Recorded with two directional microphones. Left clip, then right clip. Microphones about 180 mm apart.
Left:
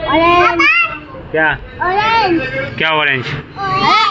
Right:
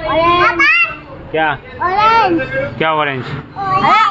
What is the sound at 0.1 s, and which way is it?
Speech, 30° left (ahead or behind).